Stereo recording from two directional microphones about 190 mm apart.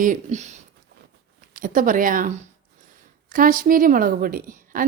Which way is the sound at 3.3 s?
45° right (ahead or behind).